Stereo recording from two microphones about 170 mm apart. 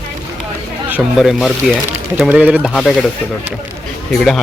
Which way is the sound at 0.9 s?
5° right (ahead or behind).